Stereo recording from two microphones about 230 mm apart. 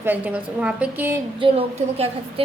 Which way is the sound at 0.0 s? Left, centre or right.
Centre.